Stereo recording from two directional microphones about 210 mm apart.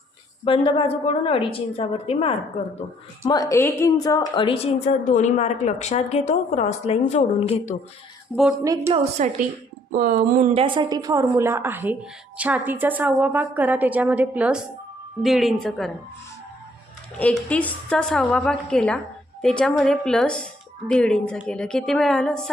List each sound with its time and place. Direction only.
0.4 s a woman's voice: 25° left (ahead or behind)
8.3 s a woman's voice: 5° left (ahead or behind)
8.6 s a woman's voice: 15° right (ahead or behind)
9.2 s a woman's voice: 35° right (ahead or behind); by 15.9 s centre (ahead or behind)
17.2 s a woman's voice: 5° left (ahead or behind)